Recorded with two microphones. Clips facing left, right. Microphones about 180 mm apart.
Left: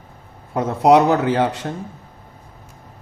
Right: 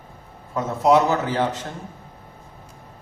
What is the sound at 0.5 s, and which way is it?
Speech, 65° left (ahead or behind).